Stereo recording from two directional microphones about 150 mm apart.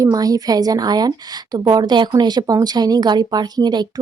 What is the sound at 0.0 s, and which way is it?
Speech, 25° right (ahead or behind).